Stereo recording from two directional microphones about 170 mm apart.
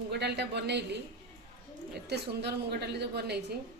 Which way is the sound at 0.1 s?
75° right (ahead or behind).